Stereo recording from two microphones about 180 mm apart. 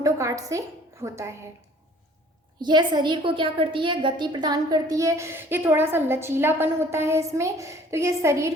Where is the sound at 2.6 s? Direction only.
25° right (ahead or behind).